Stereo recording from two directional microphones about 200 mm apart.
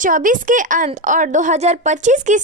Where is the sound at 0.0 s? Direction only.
40° right (ahead or behind).